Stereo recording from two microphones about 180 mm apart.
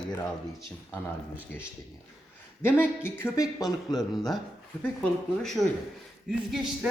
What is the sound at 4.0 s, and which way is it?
Speech, centre (ahead or behind).